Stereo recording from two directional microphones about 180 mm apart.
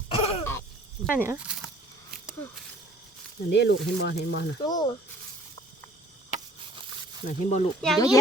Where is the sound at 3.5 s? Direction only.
70° left (ahead or behind).